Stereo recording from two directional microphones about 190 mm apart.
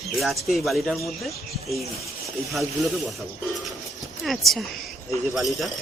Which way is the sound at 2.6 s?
Centre (ahead or behind).